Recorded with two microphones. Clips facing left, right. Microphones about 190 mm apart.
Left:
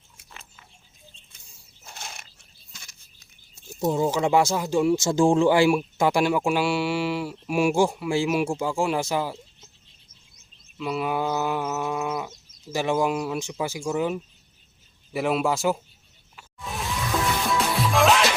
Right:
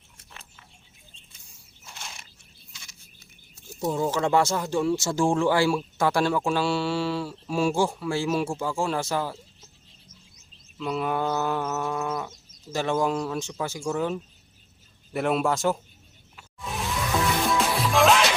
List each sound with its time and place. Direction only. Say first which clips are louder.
1.8 s a sound: left 2 dB; 45° left (ahead or behind)
3.8 s speech: left 3 dB; 20° left (ahead or behind)
10.8 s speech: left 1 dB; 5° left (ahead or behind)
17.5 s music: even; centre (ahead or behind)